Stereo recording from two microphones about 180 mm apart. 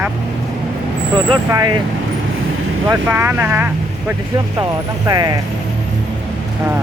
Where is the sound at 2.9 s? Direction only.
10° right (ahead or behind).